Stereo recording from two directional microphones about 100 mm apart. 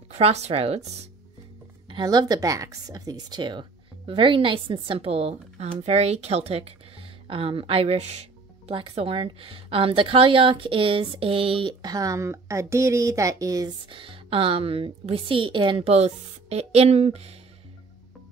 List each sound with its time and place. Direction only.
0.1 s speech: 90° right
1.9 s a woman's voice: 45° right (ahead or behind); by 11.7 s 65° right (ahead or behind)
11.8 s speech: 40° right (ahead or behind)
13.8 s a woman's voice: 60° right (ahead or behind); by 17.4 s 90° right